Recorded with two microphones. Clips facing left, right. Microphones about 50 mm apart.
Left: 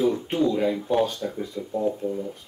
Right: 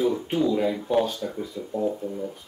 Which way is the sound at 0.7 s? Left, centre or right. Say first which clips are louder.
Even; centre.